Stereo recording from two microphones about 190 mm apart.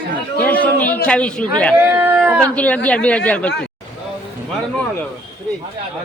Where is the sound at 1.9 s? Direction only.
15° right (ahead or behind).